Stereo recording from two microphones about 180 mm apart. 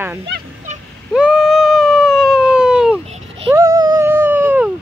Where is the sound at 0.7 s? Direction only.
40° right (ahead or behind).